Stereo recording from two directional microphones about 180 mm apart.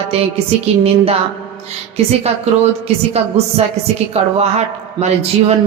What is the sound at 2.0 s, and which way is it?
Speech, 35° right (ahead or behind).